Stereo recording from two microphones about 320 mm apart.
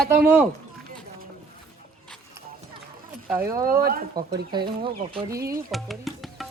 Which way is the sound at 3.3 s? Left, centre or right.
Centre.